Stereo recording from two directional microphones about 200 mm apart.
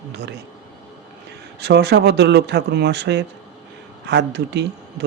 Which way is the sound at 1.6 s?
55° right (ahead or behind).